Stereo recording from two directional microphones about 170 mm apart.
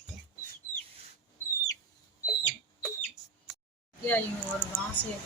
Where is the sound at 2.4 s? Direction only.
10° left (ahead or behind).